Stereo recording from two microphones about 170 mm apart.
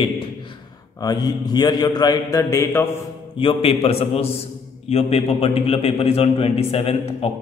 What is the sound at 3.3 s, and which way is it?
A man's voice, 30° left (ahead or behind).